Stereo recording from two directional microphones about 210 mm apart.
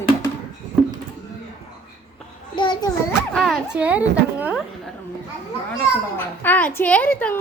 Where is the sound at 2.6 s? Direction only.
20° left (ahead or behind).